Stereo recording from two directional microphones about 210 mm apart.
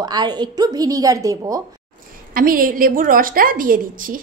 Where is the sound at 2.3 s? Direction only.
40° right (ahead or behind).